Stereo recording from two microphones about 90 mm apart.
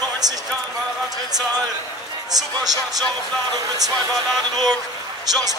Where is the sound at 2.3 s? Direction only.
45° right (ahead or behind).